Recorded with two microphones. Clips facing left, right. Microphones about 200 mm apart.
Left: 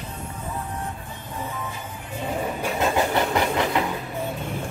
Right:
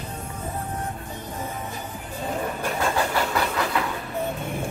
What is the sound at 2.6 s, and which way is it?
Train, 20° left (ahead or behind).